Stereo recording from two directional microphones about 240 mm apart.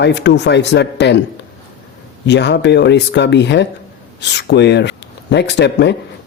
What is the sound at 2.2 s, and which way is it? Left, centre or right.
Speech, left.